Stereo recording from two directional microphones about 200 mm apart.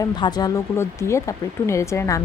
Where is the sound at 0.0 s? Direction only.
20° left (ahead or behind).